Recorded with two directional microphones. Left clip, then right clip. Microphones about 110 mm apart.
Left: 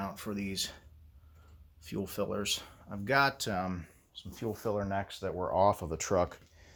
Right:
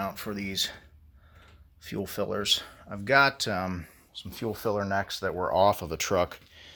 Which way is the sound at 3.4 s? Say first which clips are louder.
Right 4 dB; 40° right (ahead or behind).